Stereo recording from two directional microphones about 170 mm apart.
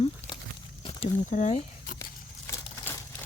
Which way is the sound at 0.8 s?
40° left (ahead or behind).